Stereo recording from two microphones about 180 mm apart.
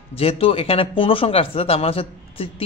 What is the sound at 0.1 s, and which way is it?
Speech, 35° left (ahead or behind).